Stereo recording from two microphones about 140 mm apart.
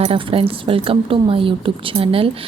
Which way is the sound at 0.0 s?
45° right (ahead or behind).